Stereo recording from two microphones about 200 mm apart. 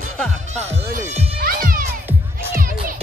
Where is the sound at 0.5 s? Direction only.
35° right (ahead or behind).